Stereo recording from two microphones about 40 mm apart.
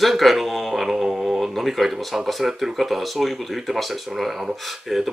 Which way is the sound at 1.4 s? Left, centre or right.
Centre.